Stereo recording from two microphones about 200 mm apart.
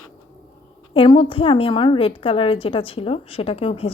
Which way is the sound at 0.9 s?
25° left (ahead or behind).